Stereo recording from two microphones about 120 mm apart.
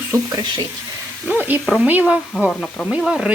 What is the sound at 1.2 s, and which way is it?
Speech, 15° right (ahead or behind).